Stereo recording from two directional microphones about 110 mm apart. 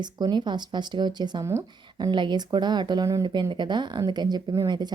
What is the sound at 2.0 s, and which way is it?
A woman's voice, 45° right (ahead or behind).